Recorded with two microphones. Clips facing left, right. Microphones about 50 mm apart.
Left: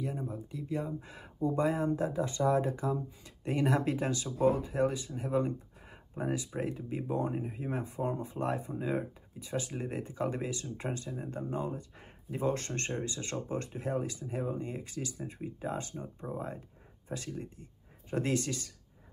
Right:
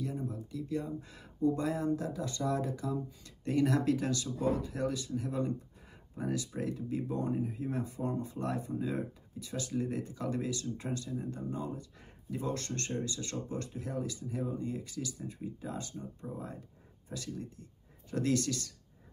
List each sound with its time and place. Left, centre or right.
0.0 s speech: left